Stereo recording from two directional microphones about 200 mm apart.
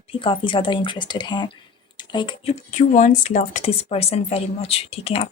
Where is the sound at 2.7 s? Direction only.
35° left (ahead or behind).